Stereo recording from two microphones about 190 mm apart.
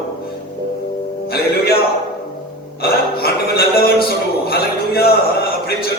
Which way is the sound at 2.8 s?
55° left (ahead or behind).